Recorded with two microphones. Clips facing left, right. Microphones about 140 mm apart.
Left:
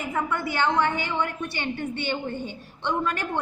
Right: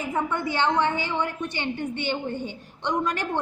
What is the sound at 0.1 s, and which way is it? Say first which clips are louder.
A woman's voice: right 1 dB; 20° right (ahead or behind).